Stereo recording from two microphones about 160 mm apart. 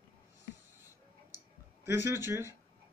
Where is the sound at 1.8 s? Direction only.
15° right (ahead or behind).